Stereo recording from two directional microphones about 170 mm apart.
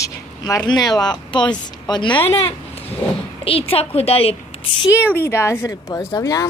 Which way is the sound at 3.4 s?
35° left (ahead or behind).